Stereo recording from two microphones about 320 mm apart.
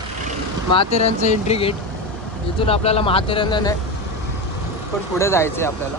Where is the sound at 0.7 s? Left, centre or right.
Centre.